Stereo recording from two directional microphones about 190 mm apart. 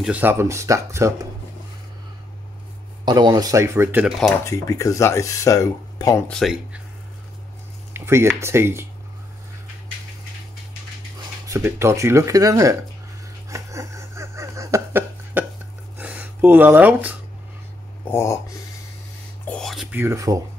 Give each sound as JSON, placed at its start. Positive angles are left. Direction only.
{"t": 0.0, "sound": "speech", "side_deg": -10}
{"t": 3.1, "sound": "speech", "side_deg": -20}
{"t": 4.5, "sound": "speech", "side_deg": 15}
{"t": 6.2, "sound": "speech", "side_deg": 0}
{"t": 7.9, "sound": "speech", "side_deg": -15}
{"t": 11.4, "sound": "speech", "side_deg": -15}
{"t": 13.5, "sound": "a sound", "side_deg": -15}
{"t": 18.0, "sound": "speech", "side_deg": 15}
{"t": 19.4, "sound": "a sound", "side_deg": 5}